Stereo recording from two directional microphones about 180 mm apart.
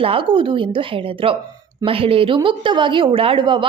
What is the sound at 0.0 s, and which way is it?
A woman's voice, 30° right (ahead or behind).